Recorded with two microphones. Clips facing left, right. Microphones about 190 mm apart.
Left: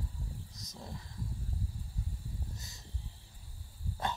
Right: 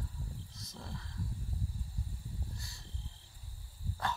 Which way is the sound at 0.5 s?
20° left (ahead or behind).